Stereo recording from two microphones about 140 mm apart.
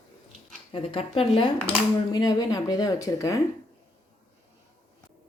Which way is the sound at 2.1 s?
30° left (ahead or behind).